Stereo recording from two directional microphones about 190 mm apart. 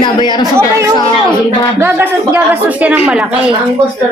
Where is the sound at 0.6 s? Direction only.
15° right (ahead or behind).